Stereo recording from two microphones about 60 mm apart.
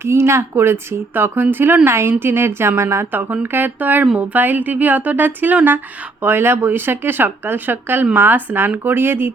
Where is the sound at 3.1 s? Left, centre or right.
Right.